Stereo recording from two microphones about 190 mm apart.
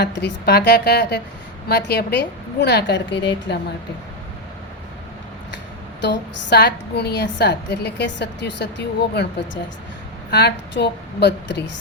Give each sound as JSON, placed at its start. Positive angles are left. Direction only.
{"t": 0.0, "sound": "a woman's voice", "side_deg": 65}
{"t": 6.0, "sound": "a woman's voice", "side_deg": 65}
{"t": 10.3, "sound": "a woman's voice", "side_deg": 65}